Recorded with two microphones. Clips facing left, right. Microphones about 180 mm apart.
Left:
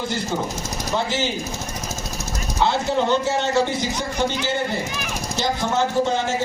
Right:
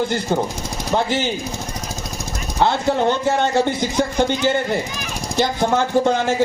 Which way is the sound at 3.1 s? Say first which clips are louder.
Right 2 dB; 55° right (ahead or behind).